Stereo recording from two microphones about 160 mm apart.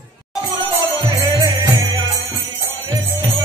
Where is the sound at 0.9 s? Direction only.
25° right (ahead or behind).